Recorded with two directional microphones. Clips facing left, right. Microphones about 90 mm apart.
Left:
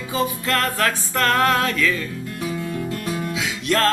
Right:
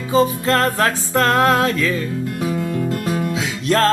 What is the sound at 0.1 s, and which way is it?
Music, 30° right (ahead or behind).